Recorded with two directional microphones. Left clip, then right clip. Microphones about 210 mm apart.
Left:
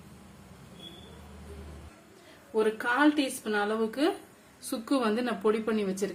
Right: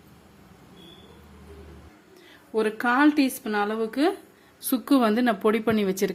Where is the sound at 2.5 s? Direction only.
45° right (ahead or behind).